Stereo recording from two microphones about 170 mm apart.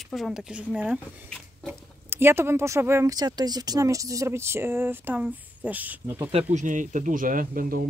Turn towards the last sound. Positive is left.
turn(degrees=-55)  # may be behind; listen again after turning